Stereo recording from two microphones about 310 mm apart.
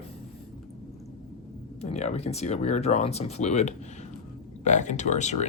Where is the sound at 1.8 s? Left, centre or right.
Left.